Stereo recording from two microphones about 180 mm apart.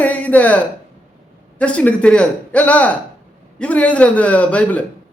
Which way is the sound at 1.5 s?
5° left (ahead or behind).